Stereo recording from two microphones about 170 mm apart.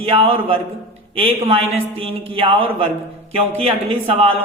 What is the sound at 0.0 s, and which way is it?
Speech, 35° right (ahead or behind).